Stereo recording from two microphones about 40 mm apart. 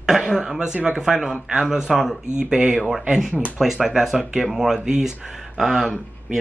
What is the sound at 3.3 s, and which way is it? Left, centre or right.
Speech, right.